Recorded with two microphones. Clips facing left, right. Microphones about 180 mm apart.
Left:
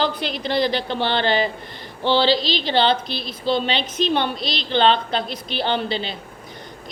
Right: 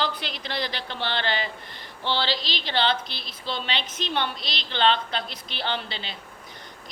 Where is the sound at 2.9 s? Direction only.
15° left (ahead or behind).